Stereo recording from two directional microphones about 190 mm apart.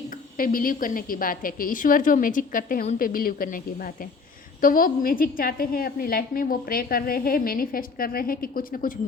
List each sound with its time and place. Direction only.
0.3 s a woman's voice: 50° left (ahead or behind)